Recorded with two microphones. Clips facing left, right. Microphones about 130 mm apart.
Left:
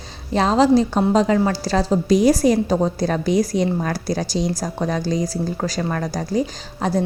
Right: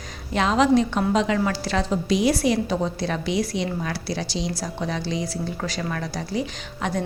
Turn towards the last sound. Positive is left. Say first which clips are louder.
# left 5 dB
turn(degrees=35)  # may be behind; listen again after turning